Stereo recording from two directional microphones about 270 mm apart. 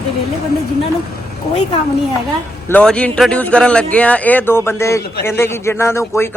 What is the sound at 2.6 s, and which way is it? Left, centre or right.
A man's voice, centre.